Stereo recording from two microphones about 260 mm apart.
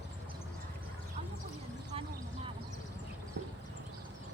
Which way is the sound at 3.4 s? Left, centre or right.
Right.